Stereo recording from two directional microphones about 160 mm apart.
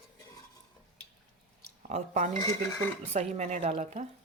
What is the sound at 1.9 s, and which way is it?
A woman's voice, 45° right (ahead or behind).